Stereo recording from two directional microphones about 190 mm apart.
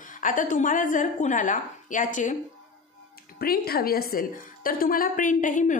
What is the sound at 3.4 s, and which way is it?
A woman's voice, 55° left (ahead or behind).